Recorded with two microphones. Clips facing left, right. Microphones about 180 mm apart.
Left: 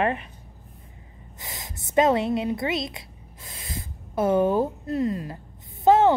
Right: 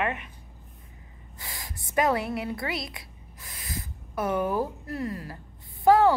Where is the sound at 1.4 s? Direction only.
20° left (ahead or behind).